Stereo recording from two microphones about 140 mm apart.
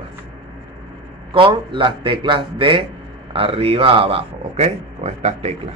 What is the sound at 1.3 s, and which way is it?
A man's voice, 35° right (ahead or behind).